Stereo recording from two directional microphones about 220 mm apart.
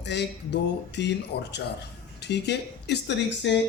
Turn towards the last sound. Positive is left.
turn(degrees=50)  # may be behind; listen again after turning